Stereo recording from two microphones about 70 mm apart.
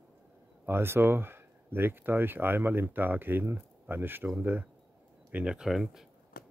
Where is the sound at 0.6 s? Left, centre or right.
Right.